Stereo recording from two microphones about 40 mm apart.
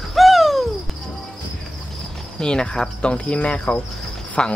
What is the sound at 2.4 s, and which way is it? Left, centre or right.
Speech, left.